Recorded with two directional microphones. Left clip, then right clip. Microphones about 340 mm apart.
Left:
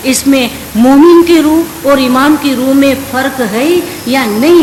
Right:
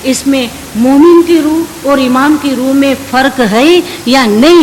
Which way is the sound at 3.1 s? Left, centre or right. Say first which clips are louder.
Right 4 dB; right.